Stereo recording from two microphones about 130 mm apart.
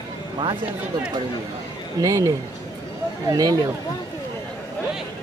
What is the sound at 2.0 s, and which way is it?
Speech, 25° right (ahead or behind).